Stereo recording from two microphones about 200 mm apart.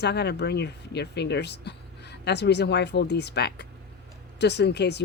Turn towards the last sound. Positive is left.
turn(degrees=55)  # may be behind; listen again after turning